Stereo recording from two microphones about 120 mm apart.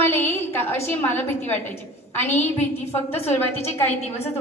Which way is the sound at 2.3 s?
75° left (ahead or behind).